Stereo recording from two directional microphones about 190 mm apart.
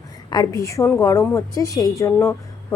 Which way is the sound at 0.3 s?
20° left (ahead or behind).